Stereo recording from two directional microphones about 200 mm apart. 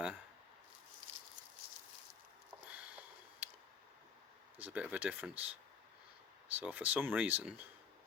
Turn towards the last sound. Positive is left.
turn(degrees=-5)  # may be behind; listen again after turning